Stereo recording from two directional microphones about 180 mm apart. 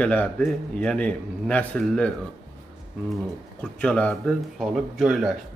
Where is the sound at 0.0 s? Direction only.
10° left (ahead or behind).